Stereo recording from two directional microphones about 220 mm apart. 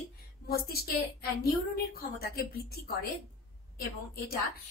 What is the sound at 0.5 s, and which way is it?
Speech, 45° left (ahead or behind).